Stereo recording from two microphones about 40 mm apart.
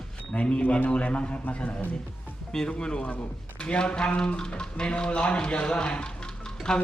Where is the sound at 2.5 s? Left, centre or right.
Centre.